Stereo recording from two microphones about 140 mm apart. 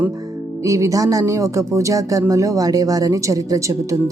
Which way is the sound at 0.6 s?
25° right (ahead or behind).